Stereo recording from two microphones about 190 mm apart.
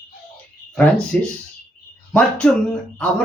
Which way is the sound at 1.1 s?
5° left (ahead or behind).